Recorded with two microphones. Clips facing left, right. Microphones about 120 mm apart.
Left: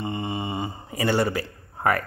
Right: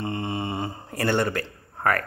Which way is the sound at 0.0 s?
Centre (ahead or behind).